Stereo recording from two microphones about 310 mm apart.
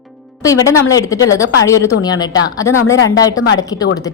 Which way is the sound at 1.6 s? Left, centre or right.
Centre.